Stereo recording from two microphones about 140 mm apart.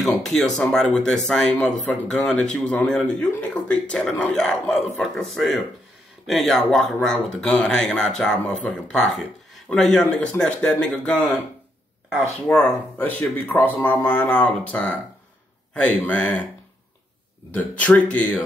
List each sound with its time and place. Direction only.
0.0 s speech: 5° left (ahead or behind)
12.4 s speech: 5° left (ahead or behind)
17.5 s speech: 10° left (ahead or behind)